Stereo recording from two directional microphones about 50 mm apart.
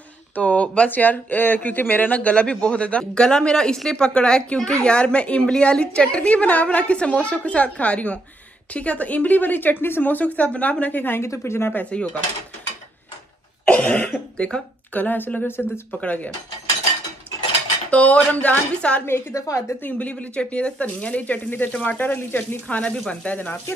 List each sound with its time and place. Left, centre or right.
0.4 s speech: left
0.8 s a woman's voice: left
11.1 s speech: left
11.7 s speech: left
13.7 s speech: left
15.0 s a woman's voice: left
15.9 s speech: left
17.9 s speech: left
19.0 s a woman's voice: left
19.9 s a woman's voice: left